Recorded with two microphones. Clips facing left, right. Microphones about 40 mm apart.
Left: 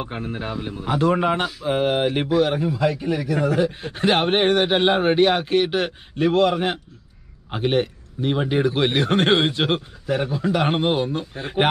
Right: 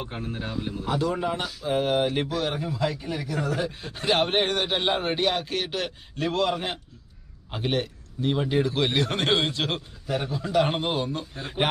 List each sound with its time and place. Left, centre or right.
0.0 s a man's voice: left
0.9 s a man's voice: left
1.6 s a man's voice: left